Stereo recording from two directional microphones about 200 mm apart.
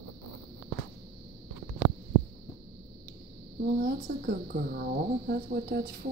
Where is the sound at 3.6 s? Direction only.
50° right (ahead or behind).